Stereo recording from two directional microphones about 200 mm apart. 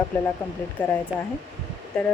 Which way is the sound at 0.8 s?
10° left (ahead or behind).